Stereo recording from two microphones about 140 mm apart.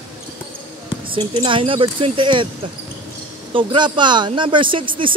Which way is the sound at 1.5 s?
40° right (ahead or behind).